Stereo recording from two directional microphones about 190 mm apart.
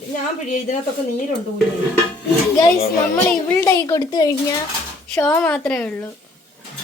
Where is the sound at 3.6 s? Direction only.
15° left (ahead or behind).